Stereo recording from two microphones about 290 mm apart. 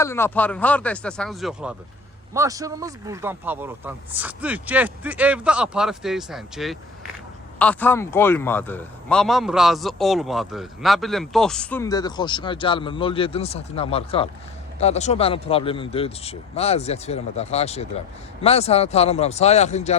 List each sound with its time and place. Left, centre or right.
0.0 s speech: centre
2.3 s a man's voice: centre; by 20.0 s left